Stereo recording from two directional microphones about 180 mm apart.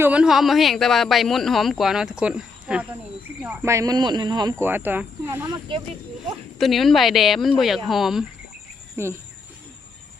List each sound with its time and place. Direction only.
0.0 s speech: 5° right (ahead or behind)
6.6 s speech: centre (ahead or behind)
9.0 s speech: 15° right (ahead or behind)